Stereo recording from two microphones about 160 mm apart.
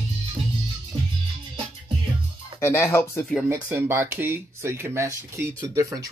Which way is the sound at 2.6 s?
15° left (ahead or behind).